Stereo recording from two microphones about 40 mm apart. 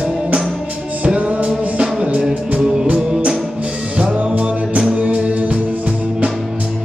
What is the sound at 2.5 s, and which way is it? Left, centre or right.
Music, right.